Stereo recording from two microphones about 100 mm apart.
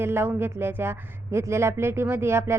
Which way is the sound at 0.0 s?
25° right (ahead or behind).